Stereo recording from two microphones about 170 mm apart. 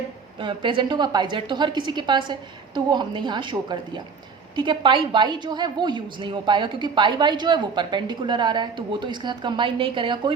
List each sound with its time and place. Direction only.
0.3 s a woman's voice: 30° right (ahead or behind)